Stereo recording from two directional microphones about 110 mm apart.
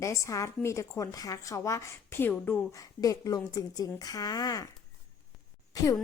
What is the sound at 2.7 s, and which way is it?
A woman's voice, 30° left (ahead or behind).